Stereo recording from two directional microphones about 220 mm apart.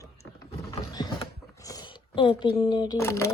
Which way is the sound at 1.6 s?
20° left (ahead or behind).